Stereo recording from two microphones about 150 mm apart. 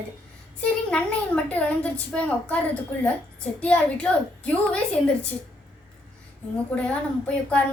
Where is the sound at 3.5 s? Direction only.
10° left (ahead or behind).